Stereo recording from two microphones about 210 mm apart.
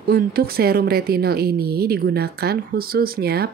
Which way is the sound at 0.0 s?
45° right (ahead or behind).